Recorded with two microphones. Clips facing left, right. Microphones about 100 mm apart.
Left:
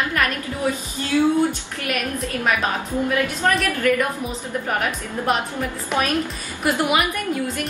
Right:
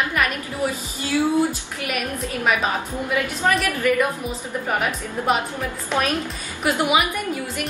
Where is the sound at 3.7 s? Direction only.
10° right (ahead or behind).